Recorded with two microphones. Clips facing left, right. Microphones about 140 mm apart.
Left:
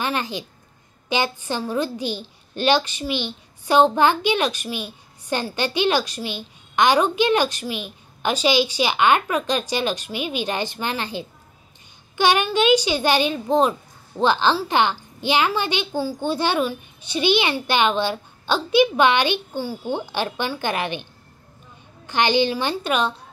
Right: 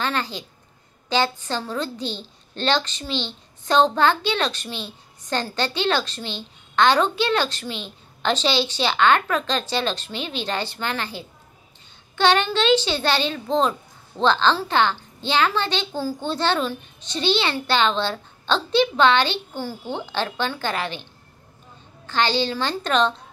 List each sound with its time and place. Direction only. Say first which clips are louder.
0.0 s a child's voice: left 1 dB; 15° left (ahead or behind)